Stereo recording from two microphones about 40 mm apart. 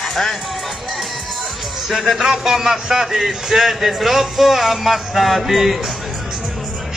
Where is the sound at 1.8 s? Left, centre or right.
Centre.